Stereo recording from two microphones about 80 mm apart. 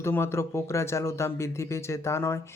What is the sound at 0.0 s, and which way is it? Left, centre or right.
Speech, left.